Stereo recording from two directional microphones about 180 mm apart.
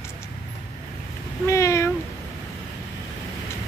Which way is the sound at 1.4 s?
15° left (ahead or behind).